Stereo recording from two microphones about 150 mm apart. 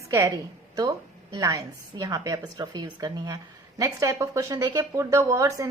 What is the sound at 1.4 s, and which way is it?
A woman's voice, 25° right (ahead or behind).